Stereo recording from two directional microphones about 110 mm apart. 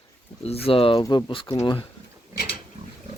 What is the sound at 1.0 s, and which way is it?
Speech, 40° left (ahead or behind).